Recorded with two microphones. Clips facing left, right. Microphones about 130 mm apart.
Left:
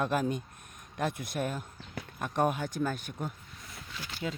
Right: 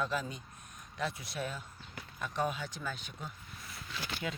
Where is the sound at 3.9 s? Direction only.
75° right (ahead or behind).